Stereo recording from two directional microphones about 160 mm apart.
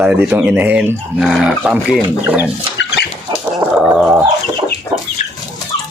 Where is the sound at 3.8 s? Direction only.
5° right (ahead or behind).